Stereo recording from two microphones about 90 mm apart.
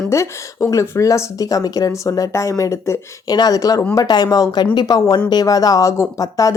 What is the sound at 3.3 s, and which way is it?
A woman's voice, 45° left (ahead or behind).